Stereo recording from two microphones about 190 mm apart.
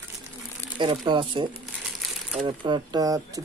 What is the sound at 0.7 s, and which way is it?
Speech, 25° right (ahead or behind).